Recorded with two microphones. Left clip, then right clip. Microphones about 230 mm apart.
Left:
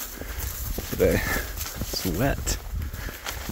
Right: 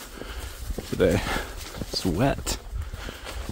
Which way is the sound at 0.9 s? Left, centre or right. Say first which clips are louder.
Even; centre.